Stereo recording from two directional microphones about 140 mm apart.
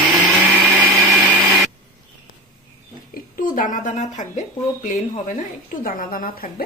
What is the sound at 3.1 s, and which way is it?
Speech, 75° left (ahead or behind).